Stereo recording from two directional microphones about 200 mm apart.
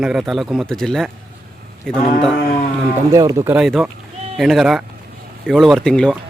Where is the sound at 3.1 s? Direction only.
15° right (ahead or behind).